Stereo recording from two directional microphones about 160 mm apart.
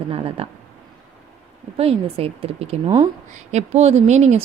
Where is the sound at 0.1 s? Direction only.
35° right (ahead or behind).